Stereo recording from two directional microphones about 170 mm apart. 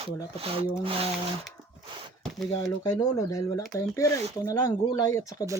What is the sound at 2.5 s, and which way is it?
Speech, 25° left (ahead or behind).